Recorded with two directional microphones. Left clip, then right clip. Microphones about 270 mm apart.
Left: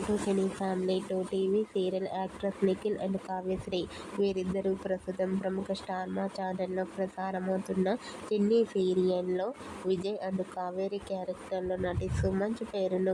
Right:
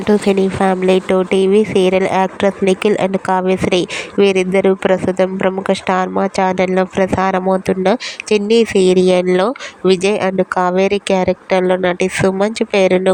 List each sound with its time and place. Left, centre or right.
0.3 s a woman's voice: right